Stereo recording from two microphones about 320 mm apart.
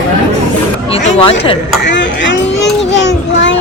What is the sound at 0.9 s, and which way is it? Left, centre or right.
Speech, centre.